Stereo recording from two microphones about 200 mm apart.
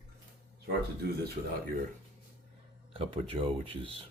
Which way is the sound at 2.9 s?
25° right (ahead or behind).